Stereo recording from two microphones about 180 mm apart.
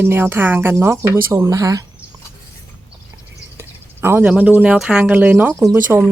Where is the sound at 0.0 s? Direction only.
10° right (ahead or behind).